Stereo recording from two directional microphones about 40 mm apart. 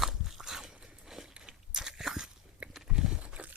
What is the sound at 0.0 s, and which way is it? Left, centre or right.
Crunch, centre.